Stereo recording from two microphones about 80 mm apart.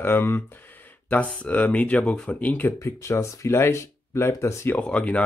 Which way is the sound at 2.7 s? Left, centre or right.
Left.